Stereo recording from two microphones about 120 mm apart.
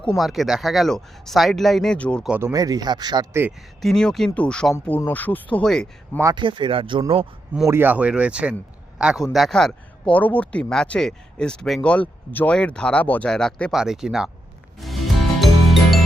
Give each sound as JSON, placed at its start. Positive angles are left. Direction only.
{"t": 0.2, "sound": "speech", "side_deg": 0}
{"t": 2.4, "sound": "speech", "side_deg": -30}
{"t": 3.8, "sound": "speech", "side_deg": 5}
{"t": 6.3, "sound": "speech", "side_deg": -40}
{"t": 7.7, "sound": "a man's voice", "side_deg": -15}
{"t": 14.8, "sound": "music", "side_deg": 0}